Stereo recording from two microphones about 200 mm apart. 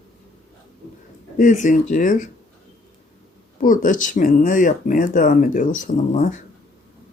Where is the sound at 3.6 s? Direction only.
45° left (ahead or behind).